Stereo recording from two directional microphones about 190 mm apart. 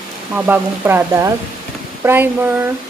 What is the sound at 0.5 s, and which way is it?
Speech, 10° right (ahead or behind).